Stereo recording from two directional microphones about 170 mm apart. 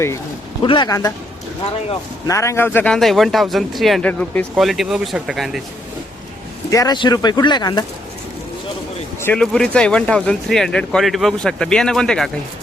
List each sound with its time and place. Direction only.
0.6 s speech: 25° left (ahead or behind)
2.2 s speech: 15° left (ahead or behind); by 5.6 s centre (ahead or behind)
6.7 s speech: 20° left (ahead or behind)
9.2 s speech: 5° left (ahead or behind)